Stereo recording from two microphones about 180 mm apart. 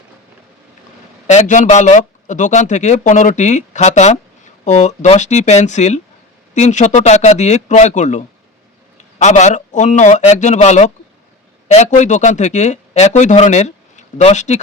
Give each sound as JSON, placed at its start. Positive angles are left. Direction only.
{"t": 1.3, "sound": "speech", "side_deg": 40}